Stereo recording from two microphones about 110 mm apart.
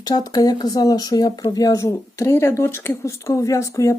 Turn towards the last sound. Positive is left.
turn(degrees=30)  # may be behind; listen again after turning